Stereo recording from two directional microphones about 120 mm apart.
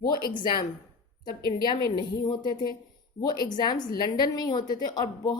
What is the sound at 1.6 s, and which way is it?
A woman's voice, 35° left (ahead or behind).